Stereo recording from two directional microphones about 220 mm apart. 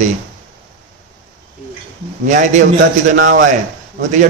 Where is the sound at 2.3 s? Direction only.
35° right (ahead or behind).